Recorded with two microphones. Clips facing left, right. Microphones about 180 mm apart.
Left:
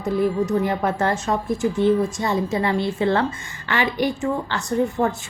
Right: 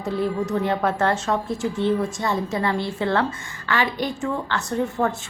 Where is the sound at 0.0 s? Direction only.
10° left (ahead or behind).